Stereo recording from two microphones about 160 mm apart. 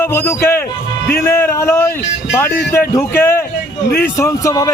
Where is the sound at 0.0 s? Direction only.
15° left (ahead or behind).